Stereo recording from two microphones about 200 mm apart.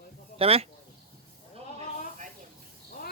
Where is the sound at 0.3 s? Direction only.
30° right (ahead or behind).